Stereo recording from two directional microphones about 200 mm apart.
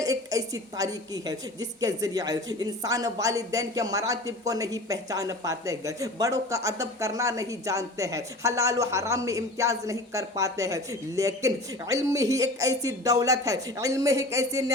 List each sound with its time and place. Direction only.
0.0 s a woman's voice: 15° right (ahead or behind)